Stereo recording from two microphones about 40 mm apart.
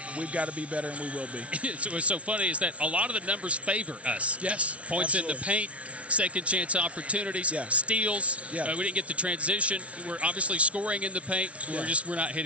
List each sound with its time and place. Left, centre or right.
0.2 s speech: right